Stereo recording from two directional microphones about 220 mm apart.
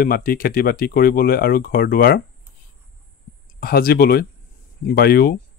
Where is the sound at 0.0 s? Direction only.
40° left (ahead or behind).